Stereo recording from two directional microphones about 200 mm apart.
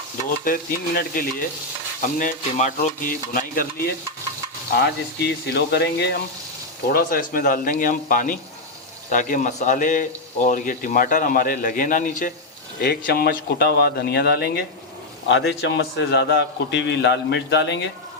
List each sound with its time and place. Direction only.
0.4 s speech: 45° left (ahead or behind)
5.5 s a man's voice: 55° left (ahead or behind)
12.8 s speech: 50° left (ahead or behind)
15.3 s a man's voice: 65° left (ahead or behind)